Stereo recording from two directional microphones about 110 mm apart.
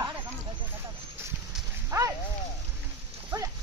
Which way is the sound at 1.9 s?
30° right (ahead or behind).